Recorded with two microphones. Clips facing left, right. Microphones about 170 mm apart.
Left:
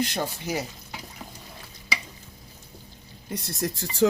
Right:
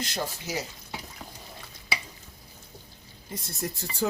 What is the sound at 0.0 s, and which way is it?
Speech, 60° left (ahead or behind).